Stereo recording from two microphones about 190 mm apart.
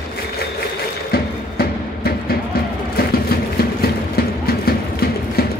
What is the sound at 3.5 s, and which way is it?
Music, 55° left (ahead or behind).